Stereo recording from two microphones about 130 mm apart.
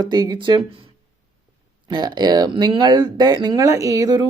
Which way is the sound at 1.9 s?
30° right (ahead or behind).